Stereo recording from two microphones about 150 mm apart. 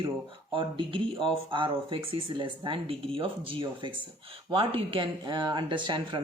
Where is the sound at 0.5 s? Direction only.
35° right (ahead or behind).